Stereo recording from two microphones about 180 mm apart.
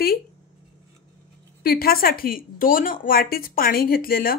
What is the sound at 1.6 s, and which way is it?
Speech, 55° left (ahead or behind).